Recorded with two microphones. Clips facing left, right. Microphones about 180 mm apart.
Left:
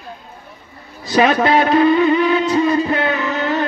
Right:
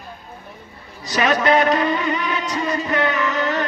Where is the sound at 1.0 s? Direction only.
30° left (ahead or behind).